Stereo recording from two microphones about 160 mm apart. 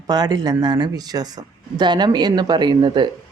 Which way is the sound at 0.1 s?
25° right (ahead or behind).